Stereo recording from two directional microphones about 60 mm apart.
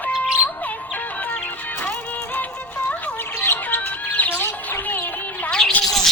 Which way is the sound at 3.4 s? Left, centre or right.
Left.